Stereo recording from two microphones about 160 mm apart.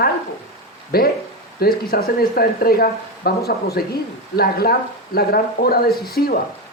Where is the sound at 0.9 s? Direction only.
70° left (ahead or behind).